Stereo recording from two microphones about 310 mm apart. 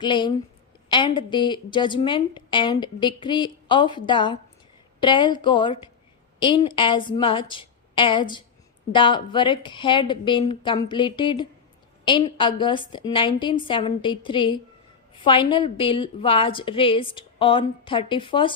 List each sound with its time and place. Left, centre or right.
0.0 s a woman's voice: centre